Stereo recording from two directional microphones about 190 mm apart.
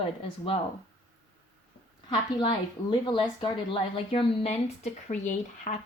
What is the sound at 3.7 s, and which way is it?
Speech, 30° left (ahead or behind).